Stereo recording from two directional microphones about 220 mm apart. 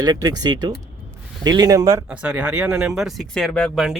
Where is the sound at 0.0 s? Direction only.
15° right (ahead or behind).